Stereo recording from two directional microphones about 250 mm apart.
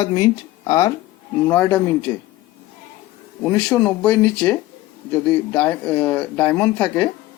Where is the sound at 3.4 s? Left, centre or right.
Centre.